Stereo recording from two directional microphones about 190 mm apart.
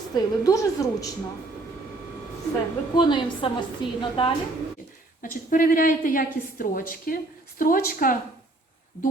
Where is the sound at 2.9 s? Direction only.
25° left (ahead or behind).